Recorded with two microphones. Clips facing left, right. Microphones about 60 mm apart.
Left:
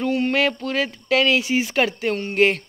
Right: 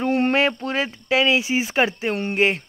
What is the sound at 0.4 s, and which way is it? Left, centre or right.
Speech, centre.